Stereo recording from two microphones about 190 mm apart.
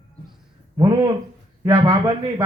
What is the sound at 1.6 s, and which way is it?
Speech, 20° right (ahead or behind).